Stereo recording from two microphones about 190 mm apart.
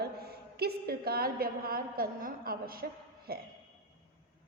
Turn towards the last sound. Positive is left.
turn(degrees=-50)  # may be behind; listen again after turning